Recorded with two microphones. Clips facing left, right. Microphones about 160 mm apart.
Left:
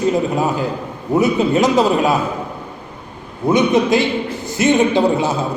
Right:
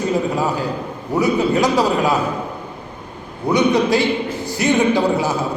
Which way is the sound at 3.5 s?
20° left (ahead or behind).